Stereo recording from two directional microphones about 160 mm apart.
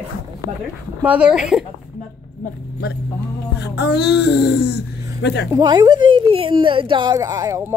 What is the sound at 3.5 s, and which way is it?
Music, 90° left.